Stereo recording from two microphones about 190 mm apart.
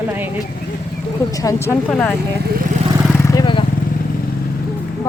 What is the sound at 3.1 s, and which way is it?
Vehicle, 20° left (ahead or behind).